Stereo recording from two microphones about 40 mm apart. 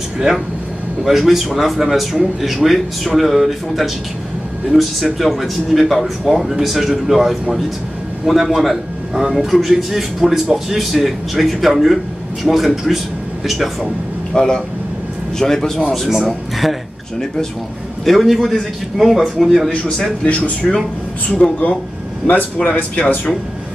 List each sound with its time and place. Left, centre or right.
1.0 s speech: centre
14.3 s a man's voice: centre
16.1 s speech: centre
18.0 s speech: centre
20.2 s speech: left